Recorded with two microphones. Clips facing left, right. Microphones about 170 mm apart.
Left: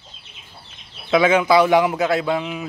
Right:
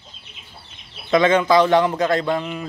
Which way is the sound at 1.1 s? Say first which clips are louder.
Even; 5° left (ahead or behind).